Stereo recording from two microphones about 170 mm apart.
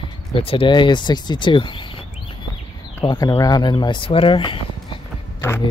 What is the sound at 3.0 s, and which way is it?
Speech, 25° left (ahead or behind).